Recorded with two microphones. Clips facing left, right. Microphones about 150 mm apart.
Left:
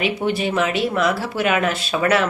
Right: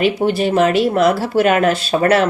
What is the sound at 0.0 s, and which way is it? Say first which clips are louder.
A woman's voice: right 5 dB; 35° right (ahead or behind).